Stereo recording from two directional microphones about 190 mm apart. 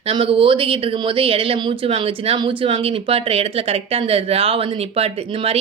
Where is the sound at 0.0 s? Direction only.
30° right (ahead or behind).